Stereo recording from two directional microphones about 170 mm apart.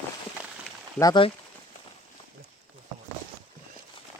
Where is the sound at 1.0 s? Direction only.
20° left (ahead or behind).